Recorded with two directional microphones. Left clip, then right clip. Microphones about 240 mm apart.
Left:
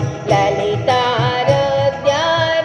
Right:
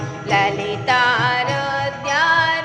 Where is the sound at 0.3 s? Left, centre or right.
Centre.